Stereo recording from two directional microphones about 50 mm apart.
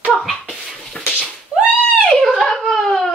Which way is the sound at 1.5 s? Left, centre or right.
Right.